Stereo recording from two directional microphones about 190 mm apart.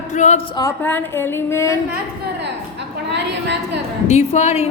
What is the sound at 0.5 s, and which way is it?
A woman's voice, 15° left (ahead or behind).